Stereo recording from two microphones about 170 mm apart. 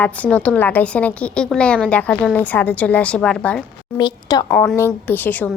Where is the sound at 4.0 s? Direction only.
25° left (ahead or behind).